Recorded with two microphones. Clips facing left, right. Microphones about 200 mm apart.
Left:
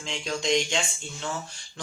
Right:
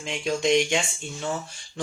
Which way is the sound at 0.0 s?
15° right (ahead or behind).